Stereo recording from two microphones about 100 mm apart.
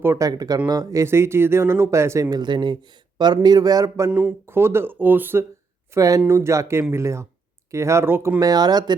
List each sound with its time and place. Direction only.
0.0 s speech: 25° right (ahead or behind)
0.3 s speech: 40° right (ahead or behind)
2.3 s speech: 50° right (ahead or behind); by 5.5 s 20° right (ahead or behind)
5.9 s speech: 35° right (ahead or behind)
8.4 s speech: 40° right (ahead or behind)